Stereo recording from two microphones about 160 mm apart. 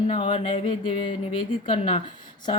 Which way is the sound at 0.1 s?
35° left (ahead or behind).